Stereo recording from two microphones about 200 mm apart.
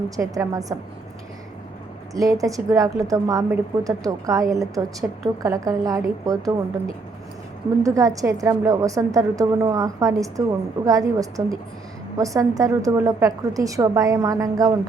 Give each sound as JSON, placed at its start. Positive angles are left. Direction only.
{"t": 0.2, "sound": "a woman's voice", "side_deg": -15}
{"t": 2.1, "sound": "a woman's voice", "side_deg": -15}